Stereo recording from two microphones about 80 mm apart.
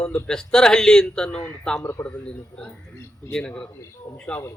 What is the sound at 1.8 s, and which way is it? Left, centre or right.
Speech, left.